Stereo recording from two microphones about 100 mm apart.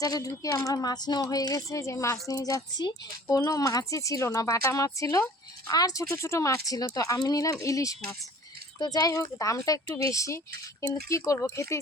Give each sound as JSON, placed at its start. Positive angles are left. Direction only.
{"t": 0.0, "sound": "speech", "side_deg": 35}